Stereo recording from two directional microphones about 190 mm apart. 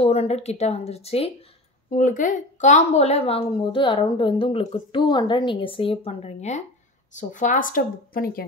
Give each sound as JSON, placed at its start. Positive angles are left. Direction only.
{"t": 0.0, "sound": "speech", "side_deg": 35}
{"t": 1.9, "sound": "a woman's voice", "side_deg": 40}